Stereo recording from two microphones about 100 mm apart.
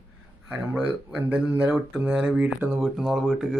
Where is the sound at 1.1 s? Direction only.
10° right (ahead or behind).